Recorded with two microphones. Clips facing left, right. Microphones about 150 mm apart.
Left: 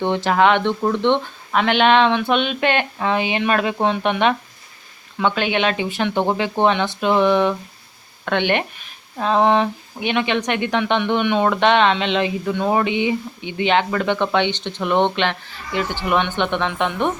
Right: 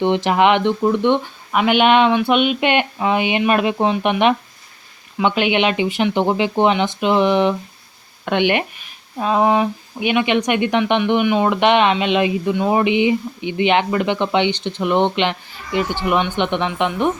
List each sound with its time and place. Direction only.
0.0 s speech: 15° right (ahead or behind)